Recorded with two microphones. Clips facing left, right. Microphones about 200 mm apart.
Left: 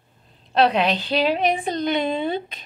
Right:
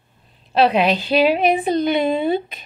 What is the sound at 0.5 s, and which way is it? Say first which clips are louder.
A woman's voice: right 3 dB; 5° right (ahead or behind).